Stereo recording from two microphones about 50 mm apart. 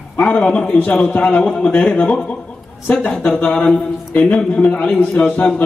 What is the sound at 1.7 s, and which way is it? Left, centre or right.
A man's voice, left.